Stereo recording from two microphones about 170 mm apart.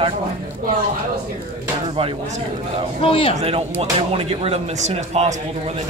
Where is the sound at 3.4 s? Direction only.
40° right (ahead or behind).